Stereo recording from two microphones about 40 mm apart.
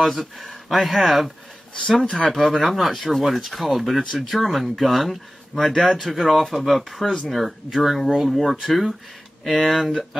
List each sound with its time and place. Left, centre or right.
0.0 s speech: centre
2.0 s speech: centre
2.3 s speech: centre